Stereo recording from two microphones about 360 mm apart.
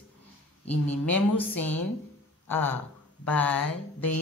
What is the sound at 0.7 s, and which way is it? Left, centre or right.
Speech, left.